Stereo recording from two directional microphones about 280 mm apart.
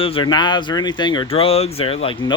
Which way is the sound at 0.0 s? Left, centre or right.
Centre.